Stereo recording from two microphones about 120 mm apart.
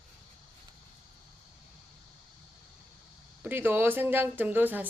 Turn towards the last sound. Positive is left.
turn(degrees=-15)  # may be behind; listen again after turning